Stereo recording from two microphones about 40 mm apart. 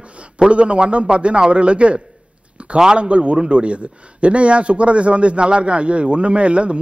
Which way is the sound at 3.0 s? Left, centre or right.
Right.